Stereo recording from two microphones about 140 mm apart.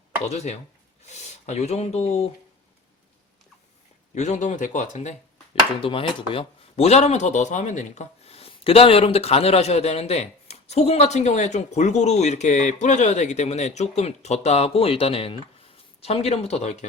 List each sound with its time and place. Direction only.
0.3 s speech: 50° left (ahead or behind)
4.1 s speech: 55° left (ahead or behind)
5.8 s speech: 40° left (ahead or behind)